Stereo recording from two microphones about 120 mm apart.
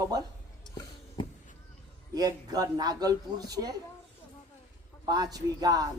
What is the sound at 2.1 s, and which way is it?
A man's voice, 30° right (ahead or behind).